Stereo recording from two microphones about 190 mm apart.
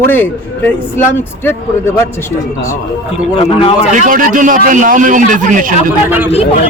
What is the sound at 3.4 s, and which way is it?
Speech, 30° left (ahead or behind).